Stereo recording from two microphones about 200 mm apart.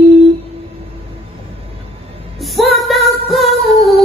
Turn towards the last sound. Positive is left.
turn(degrees=0)  # may be behind; listen again after turning